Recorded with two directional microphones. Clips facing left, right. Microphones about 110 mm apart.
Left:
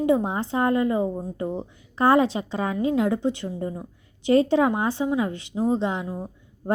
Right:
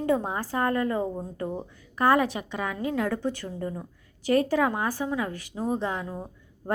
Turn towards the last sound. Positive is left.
turn(degrees=20)  # may be behind; listen again after turning